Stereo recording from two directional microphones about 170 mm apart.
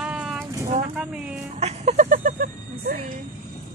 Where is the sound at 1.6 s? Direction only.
45° right (ahead or behind).